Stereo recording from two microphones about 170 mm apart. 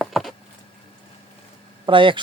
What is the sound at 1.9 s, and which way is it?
Speech, 30° right (ahead or behind).